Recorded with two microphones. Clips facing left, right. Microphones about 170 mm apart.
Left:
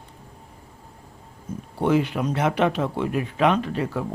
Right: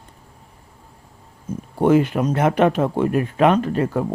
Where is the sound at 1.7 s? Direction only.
50° right (ahead or behind).